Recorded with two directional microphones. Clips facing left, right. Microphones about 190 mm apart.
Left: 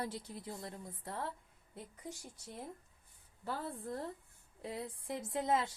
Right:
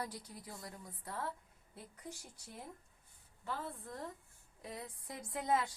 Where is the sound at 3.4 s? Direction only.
35° left (ahead or behind).